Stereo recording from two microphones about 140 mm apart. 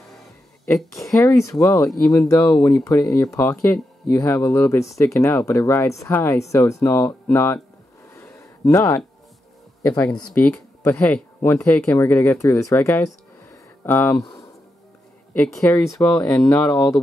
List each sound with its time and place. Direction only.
1.1 s speech: 20° left (ahead or behind)
8.1 s a sound: 20° left (ahead or behind)
9.8 s speech: 15° left (ahead or behind)
15.3 s speech: 5° left (ahead or behind)